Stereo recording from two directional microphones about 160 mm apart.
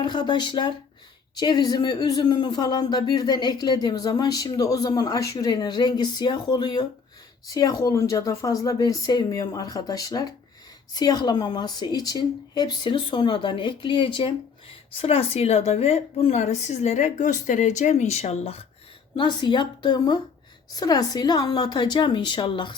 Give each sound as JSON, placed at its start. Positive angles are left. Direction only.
{"t": 0.0, "sound": "a woman's voice", "side_deg": 30}
{"t": 19.1, "sound": "speech", "side_deg": 30}